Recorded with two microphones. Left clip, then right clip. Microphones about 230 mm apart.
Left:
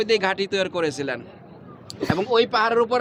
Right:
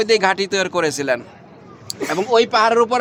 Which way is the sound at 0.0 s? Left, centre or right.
Right.